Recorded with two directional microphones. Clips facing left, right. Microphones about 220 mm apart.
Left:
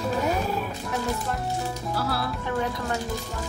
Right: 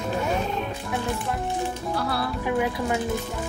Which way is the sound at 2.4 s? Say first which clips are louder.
Right 7 dB; 10° right (ahead or behind).